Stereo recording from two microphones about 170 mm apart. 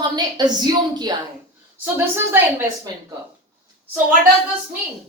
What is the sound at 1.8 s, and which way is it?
A woman's voice, 10° right (ahead or behind).